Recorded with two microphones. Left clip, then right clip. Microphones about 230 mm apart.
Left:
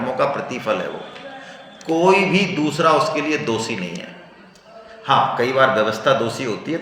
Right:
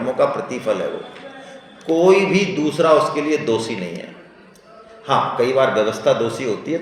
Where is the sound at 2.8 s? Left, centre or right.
Left.